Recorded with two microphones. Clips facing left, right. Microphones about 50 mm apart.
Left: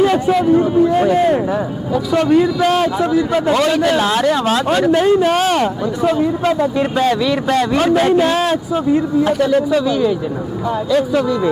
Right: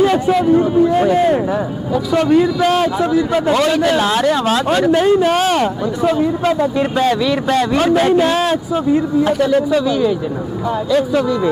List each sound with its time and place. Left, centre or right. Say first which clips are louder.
0.0 s a man's voice: even; centre